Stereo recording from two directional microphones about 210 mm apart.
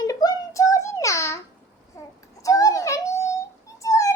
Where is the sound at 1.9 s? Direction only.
15° left (ahead or behind).